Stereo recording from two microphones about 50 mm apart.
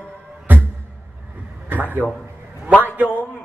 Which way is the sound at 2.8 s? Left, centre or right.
Right.